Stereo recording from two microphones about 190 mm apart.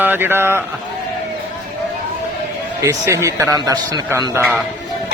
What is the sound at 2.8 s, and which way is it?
A man's voice, 15° right (ahead or behind).